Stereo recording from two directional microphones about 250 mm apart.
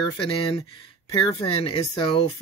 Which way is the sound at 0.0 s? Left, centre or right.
Centre.